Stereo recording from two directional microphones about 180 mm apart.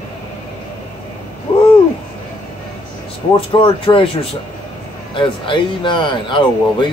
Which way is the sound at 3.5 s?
30° left (ahead or behind).